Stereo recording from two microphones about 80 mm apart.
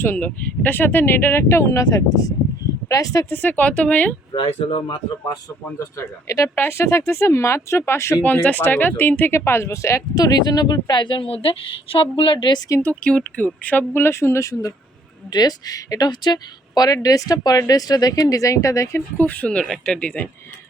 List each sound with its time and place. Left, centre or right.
0.0 s speech: left
1.8 s speech: left
3.2 s speech: left
4.3 s speech: left
5.8 s speech: left
6.6 s speech: left
8.2 s speech: left
10.2 s a woman's voice: left
12.8 s speech: centre; by 14.7 s left
15.3 s speech: left
19.1 s speech: left